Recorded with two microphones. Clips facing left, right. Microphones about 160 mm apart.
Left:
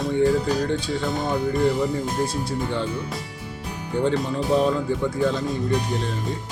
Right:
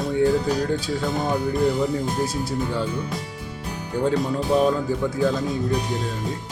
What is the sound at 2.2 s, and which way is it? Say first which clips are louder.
Speech: right 1 dB; 5° right (ahead or behind).